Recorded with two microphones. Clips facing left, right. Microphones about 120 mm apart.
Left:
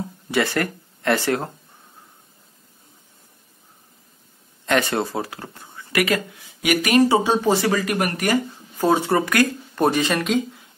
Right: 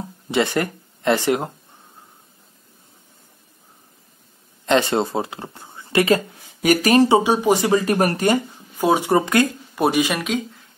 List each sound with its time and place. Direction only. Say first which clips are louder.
0.3 s speech: right 2 dB; 20° right (ahead or behind)
4.6 s speech: right 3 dB; 25° right (ahead or behind)
7.1 s speech: right 2 dB; 15° right (ahead or behind)
8.7 s speech: right 1 dB; 15° right (ahead or behind)
9.8 s speech: even; 10° right (ahead or behind)